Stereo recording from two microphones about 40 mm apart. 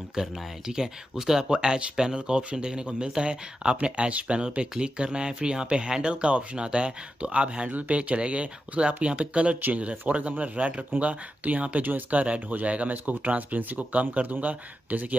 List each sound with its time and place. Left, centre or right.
0.1 s speech: centre
4.1 s speech: right
4.4 s speech: right
7.7 s speech: right